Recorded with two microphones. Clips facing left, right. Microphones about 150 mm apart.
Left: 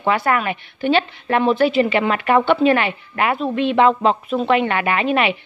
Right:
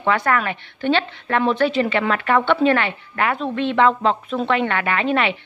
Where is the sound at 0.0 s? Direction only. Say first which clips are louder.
Left 1 dB; 10° left (ahead or behind).